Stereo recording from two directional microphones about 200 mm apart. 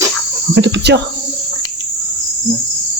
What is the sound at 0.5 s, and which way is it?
Cricket, 60° right (ahead or behind).